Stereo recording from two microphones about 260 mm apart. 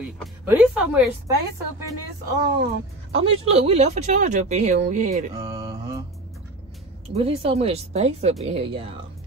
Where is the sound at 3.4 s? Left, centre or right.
Right.